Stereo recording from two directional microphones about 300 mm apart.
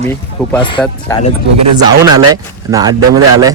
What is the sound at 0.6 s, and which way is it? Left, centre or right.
Speech, centre.